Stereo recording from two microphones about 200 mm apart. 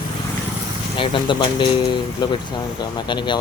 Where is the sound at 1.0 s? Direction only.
25° left (ahead or behind).